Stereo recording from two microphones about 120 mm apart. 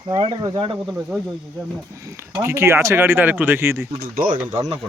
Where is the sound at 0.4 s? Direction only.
35° right (ahead or behind).